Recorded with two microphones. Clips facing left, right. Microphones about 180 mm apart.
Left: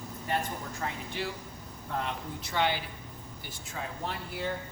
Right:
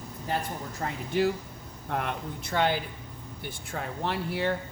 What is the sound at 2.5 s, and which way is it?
A woman's voice, 50° right (ahead or behind).